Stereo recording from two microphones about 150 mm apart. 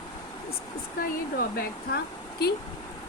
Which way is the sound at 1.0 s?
75° left (ahead or behind).